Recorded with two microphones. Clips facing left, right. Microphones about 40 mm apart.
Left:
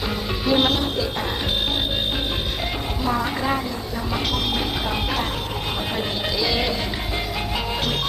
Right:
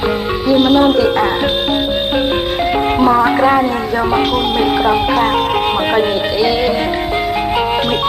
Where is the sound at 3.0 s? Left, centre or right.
Right.